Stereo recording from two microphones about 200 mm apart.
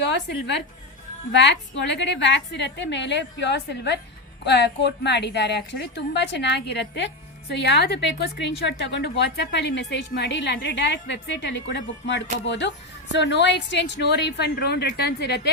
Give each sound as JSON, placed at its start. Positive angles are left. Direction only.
{"t": 0.0, "sound": "a woman's voice", "side_deg": 60}